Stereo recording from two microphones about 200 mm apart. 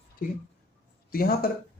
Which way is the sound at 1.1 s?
50° left (ahead or behind).